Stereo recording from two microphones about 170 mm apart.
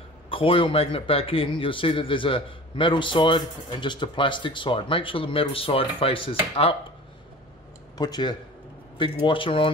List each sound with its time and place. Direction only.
0.3 s a man's voice: 30° left (ahead or behind)
8.0 s a man's voice: 25° left (ahead or behind)